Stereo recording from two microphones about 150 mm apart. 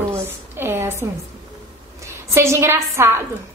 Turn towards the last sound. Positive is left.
turn(degrees=-20)  # may be behind; listen again after turning